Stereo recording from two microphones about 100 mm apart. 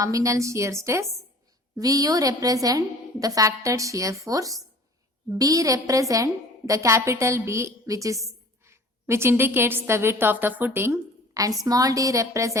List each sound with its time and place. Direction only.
0.0 s a woman's voice: 35° right (ahead or behind)
11.6 s a woman's voice: 35° right (ahead or behind)